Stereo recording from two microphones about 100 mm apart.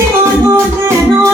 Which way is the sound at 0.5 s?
30° right (ahead or behind).